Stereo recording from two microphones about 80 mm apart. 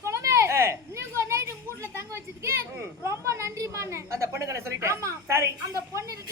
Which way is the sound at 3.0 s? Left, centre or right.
Right.